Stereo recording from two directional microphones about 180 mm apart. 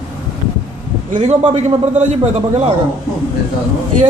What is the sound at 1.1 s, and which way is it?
Speech, 35° right (ahead or behind).